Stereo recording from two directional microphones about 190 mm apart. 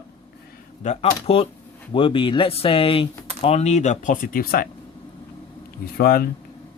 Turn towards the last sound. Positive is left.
turn(degrees=50)  # may be behind; listen again after turning